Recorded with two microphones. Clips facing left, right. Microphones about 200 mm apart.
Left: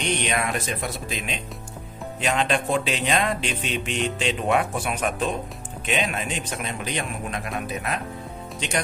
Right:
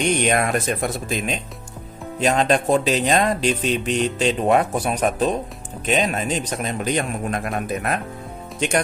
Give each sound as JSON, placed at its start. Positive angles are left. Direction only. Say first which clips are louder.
{"t": 0.0, "sound": "a man's voice", "louder": "right 6 dB", "side_deg": -45}